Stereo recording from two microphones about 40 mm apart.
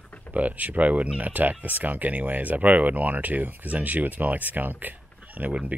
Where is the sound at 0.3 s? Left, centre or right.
Right.